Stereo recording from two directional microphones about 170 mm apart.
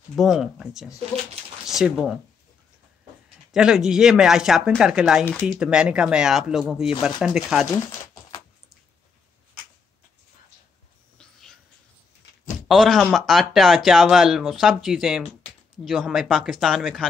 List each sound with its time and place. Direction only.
0.1 s speech: centre (ahead or behind)
3.5 s speech: 5° right (ahead or behind)
7.7 s a sound: 25° left (ahead or behind)
12.6 s speech: centre (ahead or behind)